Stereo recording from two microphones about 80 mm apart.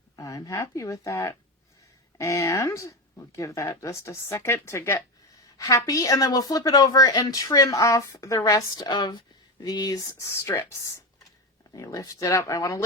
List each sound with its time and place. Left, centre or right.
0.2 s a woman's voice: left
11.8 s a woman's voice: left